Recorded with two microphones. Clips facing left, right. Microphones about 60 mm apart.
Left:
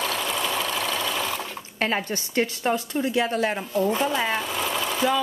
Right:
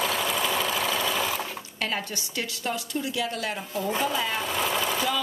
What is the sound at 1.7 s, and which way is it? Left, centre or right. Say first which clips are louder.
A woman's voice: left 6 dB; left.